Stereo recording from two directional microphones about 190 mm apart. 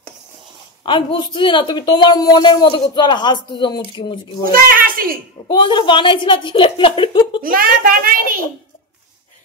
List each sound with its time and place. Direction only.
0.8 s a woman's voice: 25° left (ahead or behind)
4.5 s a child's voice: 50° right (ahead or behind)
5.5 s a woman's voice: 25° left (ahead or behind)
7.4 s a child's voice: 50° right (ahead or behind)